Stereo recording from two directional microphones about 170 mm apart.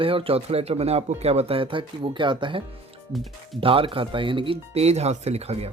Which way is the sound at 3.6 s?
30° right (ahead or behind).